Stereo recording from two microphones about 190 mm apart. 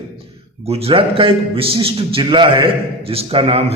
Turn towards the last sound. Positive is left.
turn(degrees=-30)  # may be behind; listen again after turning